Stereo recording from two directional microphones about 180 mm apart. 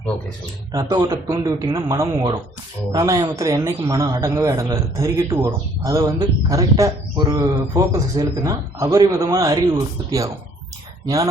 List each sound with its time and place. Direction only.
0.7 s speech: 20° right (ahead or behind)